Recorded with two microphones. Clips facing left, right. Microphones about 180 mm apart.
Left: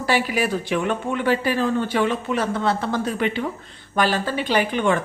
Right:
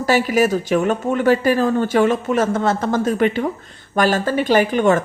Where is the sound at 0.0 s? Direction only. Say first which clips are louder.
Right 6 dB; 45° right (ahead or behind).